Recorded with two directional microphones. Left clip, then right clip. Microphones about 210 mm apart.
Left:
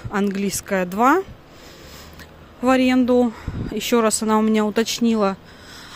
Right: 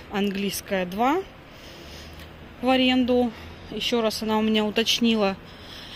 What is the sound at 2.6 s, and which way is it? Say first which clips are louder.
Speech: left 4 dB; 25° left (ahead or behind).